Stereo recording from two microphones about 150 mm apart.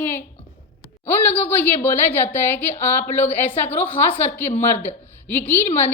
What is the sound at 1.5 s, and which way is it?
A woman's voice, 15° left (ahead or behind).